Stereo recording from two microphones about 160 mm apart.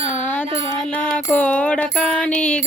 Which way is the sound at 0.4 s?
40° right (ahead or behind).